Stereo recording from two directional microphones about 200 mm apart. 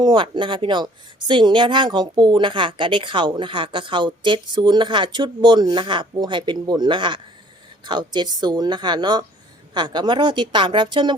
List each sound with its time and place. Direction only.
0.0 s speech: 25° right (ahead or behind)